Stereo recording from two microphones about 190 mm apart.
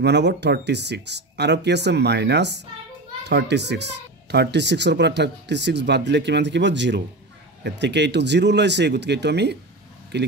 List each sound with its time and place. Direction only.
0.0 s speech: 65° right (ahead or behind)